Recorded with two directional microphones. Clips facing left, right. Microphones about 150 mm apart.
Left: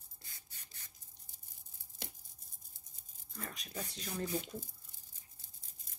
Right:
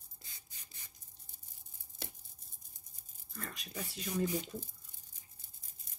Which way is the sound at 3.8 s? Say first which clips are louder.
Right 5 dB; 10° right (ahead or behind).